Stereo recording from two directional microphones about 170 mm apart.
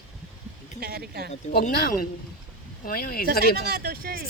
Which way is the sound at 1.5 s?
60° left (ahead or behind).